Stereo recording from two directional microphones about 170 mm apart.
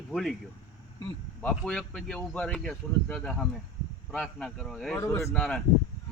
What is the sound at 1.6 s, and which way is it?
Speech, 5° left (ahead or behind).